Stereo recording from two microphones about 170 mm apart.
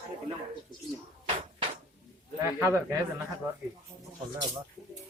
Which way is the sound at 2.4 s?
15° right (ahead or behind).